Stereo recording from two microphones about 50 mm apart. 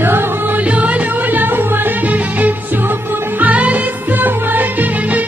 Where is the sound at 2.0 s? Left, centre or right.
Right.